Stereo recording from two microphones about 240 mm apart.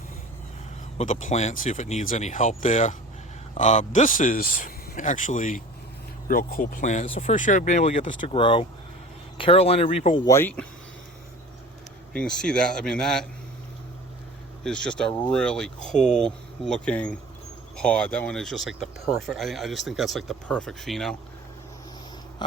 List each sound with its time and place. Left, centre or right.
0.9 s speech: left
10.2 s speech: centre
12.1 s speech: centre
14.6 s speech: centre
22.4 s a sound: centre